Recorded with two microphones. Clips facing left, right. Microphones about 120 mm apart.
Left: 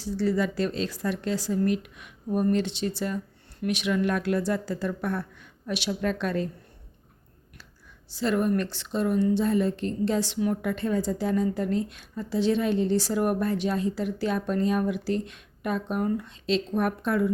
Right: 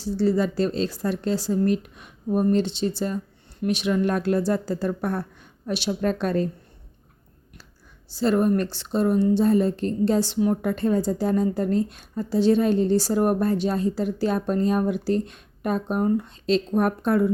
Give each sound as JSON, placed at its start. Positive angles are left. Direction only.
{"t": 0.0, "sound": "a woman's voice", "side_deg": -30}
{"t": 8.1, "sound": "a woman's voice", "side_deg": -35}